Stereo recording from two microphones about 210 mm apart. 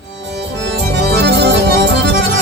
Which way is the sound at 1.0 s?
50° right (ahead or behind).